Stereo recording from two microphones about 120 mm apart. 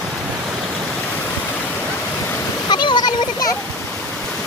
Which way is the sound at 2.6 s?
40° left (ahead or behind).